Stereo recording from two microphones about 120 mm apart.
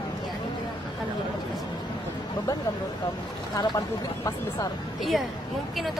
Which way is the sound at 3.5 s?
35° left (ahead or behind).